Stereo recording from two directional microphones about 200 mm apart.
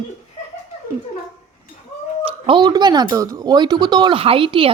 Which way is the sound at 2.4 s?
25° right (ahead or behind).